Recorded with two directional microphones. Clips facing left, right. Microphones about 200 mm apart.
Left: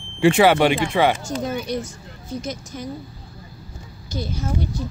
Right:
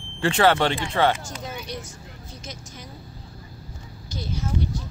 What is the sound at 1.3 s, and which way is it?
Speech, 50° left (ahead or behind).